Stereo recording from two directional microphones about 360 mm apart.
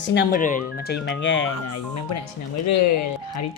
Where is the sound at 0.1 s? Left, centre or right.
Left.